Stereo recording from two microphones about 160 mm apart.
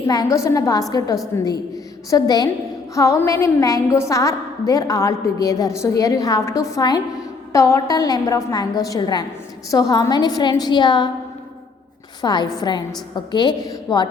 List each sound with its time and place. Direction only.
0.1 s a woman's voice: 20° left (ahead or behind)
12.2 s a woman's voice: 25° left (ahead or behind)